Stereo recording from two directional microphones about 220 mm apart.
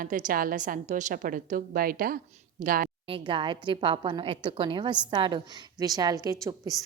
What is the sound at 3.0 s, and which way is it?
A woman's voice, 25° right (ahead or behind).